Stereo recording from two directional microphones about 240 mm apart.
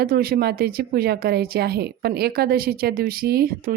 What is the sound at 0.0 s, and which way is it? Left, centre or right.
Speech, right.